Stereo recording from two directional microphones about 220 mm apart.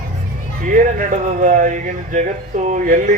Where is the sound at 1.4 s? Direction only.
35° right (ahead or behind).